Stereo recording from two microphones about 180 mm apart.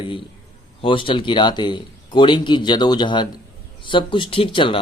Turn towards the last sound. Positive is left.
turn(degrees=30)  # may be behind; listen again after turning